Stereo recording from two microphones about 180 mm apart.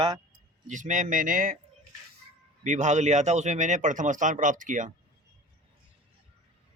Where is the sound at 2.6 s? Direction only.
40° right (ahead or behind).